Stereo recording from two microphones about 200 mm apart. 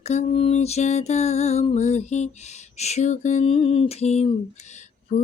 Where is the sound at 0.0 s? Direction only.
35° left (ahead or behind).